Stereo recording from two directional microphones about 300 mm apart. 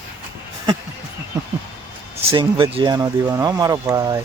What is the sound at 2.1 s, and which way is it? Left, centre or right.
Speech, centre.